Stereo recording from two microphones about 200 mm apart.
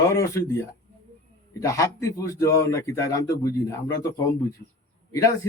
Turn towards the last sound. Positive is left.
turn(degrees=15)  # may be behind; listen again after turning